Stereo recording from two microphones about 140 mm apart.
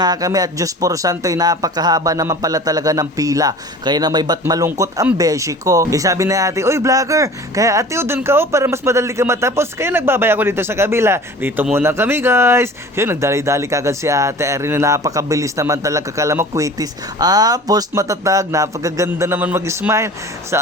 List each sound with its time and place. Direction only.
0.0 s speech: 25° right (ahead or behind)